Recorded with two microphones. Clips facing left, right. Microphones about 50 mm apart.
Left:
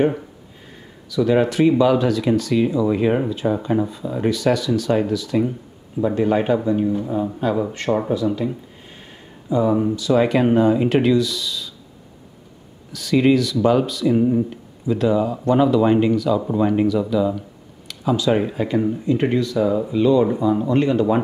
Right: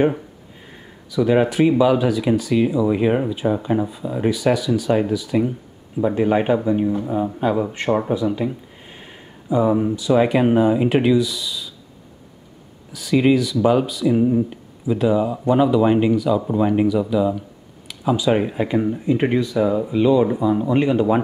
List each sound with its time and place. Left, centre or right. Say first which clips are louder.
1.1 s speech: even; centre
12.9 s speech: even; centre